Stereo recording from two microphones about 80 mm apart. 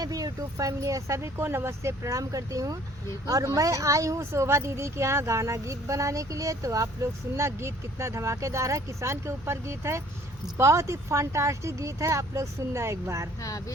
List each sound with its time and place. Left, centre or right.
0.0 s speech: right
13.4 s speech: left